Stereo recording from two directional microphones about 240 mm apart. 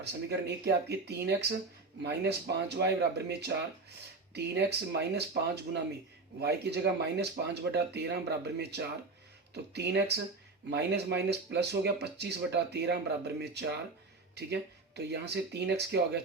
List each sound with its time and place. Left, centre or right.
0.0 s speech: right
4.9 s speech: right